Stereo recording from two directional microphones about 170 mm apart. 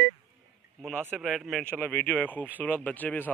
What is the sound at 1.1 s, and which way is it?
A man's voice, centre (ahead or behind).